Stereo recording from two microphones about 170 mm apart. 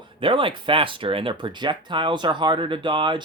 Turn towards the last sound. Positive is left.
turn(degrees=-30)  # may be behind; listen again after turning